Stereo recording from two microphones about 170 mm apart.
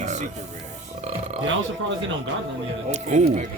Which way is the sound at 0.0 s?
45° right (ahead or behind).